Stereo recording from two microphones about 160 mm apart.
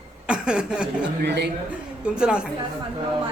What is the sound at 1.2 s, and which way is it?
Speech, 90° right.